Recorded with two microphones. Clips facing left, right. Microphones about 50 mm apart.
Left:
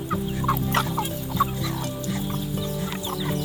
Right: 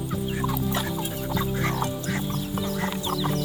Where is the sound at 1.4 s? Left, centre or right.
Left.